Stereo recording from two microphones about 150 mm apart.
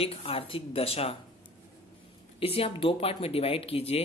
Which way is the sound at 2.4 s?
40° left (ahead or behind).